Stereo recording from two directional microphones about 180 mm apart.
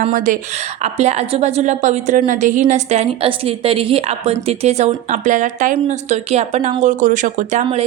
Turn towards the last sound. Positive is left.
turn(degrees=-45)  # may be behind; listen again after turning